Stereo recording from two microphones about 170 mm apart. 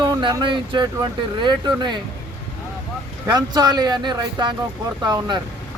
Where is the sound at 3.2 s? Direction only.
25° right (ahead or behind).